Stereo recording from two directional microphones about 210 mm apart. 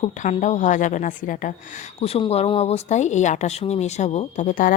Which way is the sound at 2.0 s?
30° left (ahead or behind).